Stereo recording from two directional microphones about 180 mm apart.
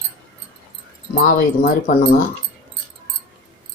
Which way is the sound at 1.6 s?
50° left (ahead or behind).